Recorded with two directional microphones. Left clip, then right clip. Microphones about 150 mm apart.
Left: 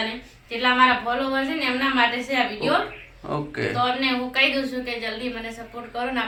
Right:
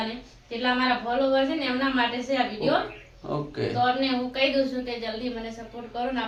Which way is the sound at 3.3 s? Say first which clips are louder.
Left 3 dB; 5° left (ahead or behind).